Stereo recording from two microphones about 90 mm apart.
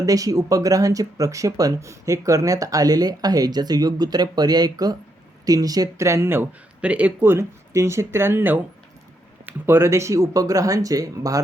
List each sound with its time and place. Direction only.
0.0 s speech: 40° right (ahead or behind); by 7.3 s 20° right (ahead or behind)
7.3 s speech: 30° right (ahead or behind)